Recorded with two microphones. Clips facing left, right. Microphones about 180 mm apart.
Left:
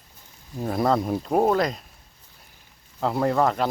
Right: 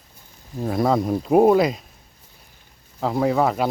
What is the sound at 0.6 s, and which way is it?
Speech, centre (ahead or behind).